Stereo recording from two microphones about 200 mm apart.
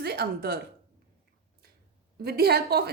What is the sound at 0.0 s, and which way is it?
Speech, 50° right (ahead or behind).